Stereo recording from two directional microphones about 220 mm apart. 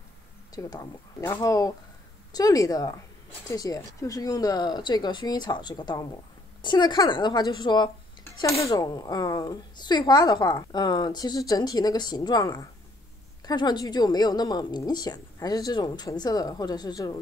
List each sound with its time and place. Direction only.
0.6 s a woman's voice: 15° left (ahead or behind)